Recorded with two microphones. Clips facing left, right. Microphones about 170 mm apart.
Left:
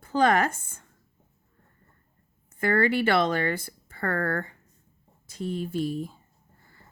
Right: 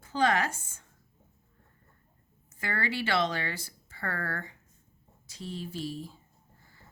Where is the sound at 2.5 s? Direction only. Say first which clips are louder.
Left 10 dB; 55° left (ahead or behind).